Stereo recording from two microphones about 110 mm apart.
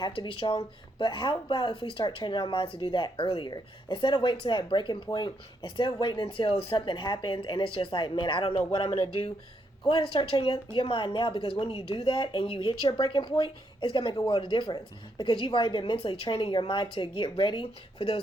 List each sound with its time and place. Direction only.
0.0 s speech: 45° left (ahead or behind)
9.8 s speech: 45° left (ahead or behind)
11.6 s speech: 60° left (ahead or behind)